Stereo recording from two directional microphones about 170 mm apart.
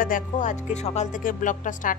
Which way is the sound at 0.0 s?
50° left (ahead or behind).